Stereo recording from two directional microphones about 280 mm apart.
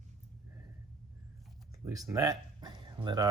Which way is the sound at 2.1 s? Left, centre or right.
Centre.